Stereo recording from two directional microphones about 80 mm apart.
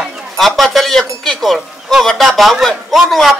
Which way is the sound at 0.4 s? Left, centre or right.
Centre.